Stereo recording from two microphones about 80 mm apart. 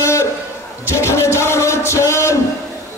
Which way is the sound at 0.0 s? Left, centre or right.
Left.